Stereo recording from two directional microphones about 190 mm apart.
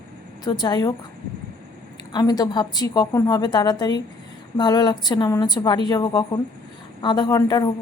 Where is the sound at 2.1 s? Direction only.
20° left (ahead or behind).